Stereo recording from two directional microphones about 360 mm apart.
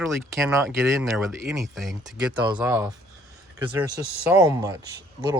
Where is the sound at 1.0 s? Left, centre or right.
Centre.